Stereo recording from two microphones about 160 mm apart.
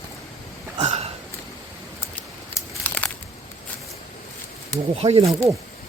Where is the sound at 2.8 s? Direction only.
10° left (ahead or behind).